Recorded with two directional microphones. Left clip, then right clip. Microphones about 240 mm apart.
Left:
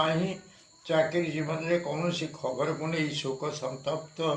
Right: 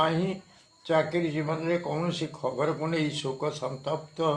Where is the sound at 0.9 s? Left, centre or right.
Right.